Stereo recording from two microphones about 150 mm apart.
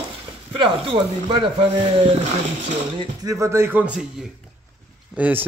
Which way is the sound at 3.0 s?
20° right (ahead or behind).